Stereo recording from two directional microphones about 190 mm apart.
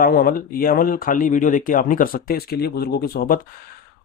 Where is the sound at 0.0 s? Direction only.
50° left (ahead or behind).